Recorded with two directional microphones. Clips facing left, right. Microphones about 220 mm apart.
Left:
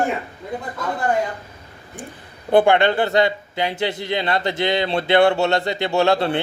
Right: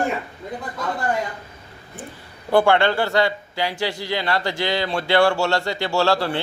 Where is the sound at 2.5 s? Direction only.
20° left (ahead or behind).